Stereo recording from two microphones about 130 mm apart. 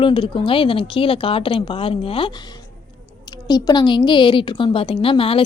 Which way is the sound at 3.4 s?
30° left (ahead or behind).